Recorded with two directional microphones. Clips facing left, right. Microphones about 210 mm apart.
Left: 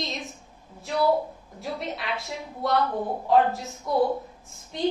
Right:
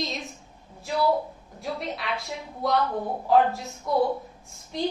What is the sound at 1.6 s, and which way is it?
A woman's voice, centre (ahead or behind).